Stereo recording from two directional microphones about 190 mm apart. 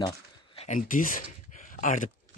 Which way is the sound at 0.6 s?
40° left (ahead or behind).